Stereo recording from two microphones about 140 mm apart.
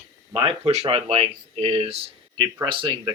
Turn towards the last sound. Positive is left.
turn(degrees=-35)  # may be behind; listen again after turning